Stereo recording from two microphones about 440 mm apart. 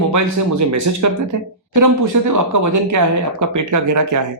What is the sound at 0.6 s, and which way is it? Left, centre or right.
Speech, right.